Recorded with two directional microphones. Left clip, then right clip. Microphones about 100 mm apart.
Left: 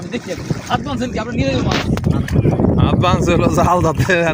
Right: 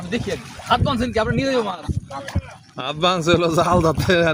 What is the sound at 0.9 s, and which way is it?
Speech, 45° right (ahead or behind).